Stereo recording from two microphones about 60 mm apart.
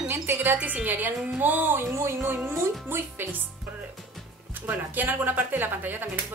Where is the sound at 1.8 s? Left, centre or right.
Right.